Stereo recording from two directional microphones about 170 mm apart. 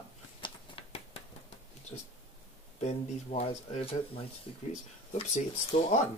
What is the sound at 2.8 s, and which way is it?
Speech, 40° left (ahead or behind).